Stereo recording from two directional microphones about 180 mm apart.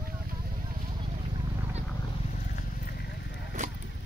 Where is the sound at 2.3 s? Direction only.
45° left (ahead or behind).